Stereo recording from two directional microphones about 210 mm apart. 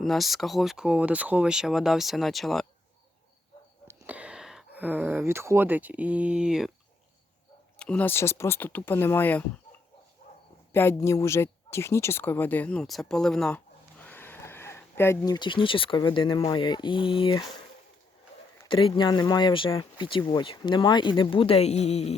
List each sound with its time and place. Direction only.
0.0 s speech: centre (ahead or behind)
3.8 s speech: 5° right (ahead or behind)
7.8 s speech: 5° left (ahead or behind)
10.7 s speech: 10° left (ahead or behind)
18.7 s speech: 25° left (ahead or behind)